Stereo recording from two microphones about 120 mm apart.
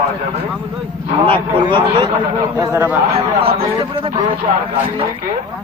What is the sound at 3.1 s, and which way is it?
Speech, 55° right (ahead or behind).